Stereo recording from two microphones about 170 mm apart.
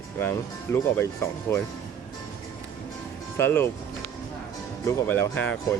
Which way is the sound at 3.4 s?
15° left (ahead or behind).